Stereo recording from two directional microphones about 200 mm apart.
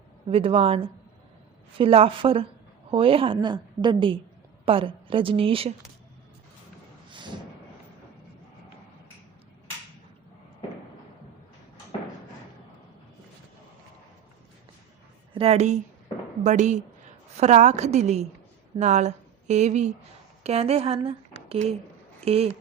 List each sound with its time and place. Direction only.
0.3 s a woman's voice: 30° right (ahead or behind)
7.1 s a sound: 25° right (ahead or behind)
15.4 s a woman's voice: 30° right (ahead or behind)